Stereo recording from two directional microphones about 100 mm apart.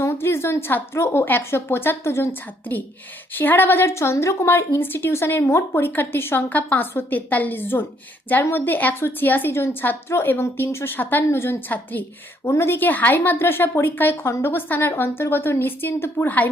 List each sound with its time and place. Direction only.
0.0 s a woman's voice: 25° left (ahead or behind)